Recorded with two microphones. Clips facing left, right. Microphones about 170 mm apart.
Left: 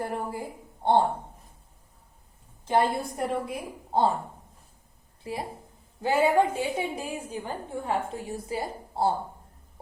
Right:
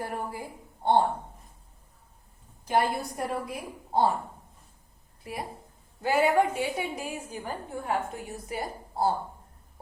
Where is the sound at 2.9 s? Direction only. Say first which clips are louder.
Left 2 dB; 25° left (ahead or behind).